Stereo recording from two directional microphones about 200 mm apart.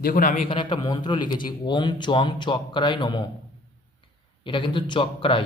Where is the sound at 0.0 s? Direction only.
45° left (ahead or behind).